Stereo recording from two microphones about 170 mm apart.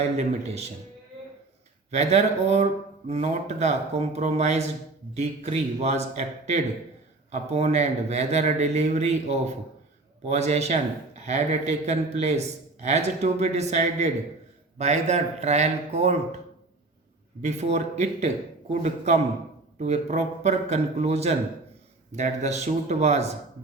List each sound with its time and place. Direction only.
0.0 s a man's voice: 40° right (ahead or behind)
1.9 s a man's voice: 40° right (ahead or behind)
17.4 s a man's voice: 40° right (ahead or behind)